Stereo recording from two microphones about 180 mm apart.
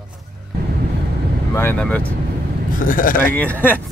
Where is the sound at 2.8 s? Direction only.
50° left (ahead or behind).